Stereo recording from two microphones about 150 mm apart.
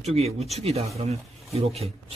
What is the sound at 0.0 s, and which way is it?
A man's voice, 45° right (ahead or behind).